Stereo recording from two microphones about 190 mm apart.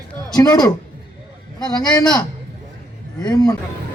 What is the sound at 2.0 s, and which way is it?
A man's voice, 20° left (ahead or behind).